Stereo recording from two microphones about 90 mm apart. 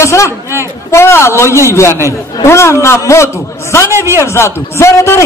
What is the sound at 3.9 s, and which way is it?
Speech, 30° right (ahead or behind).